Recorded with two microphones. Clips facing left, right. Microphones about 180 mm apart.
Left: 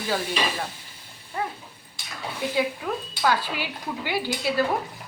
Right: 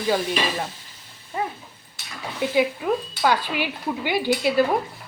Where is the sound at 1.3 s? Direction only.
20° right (ahead or behind).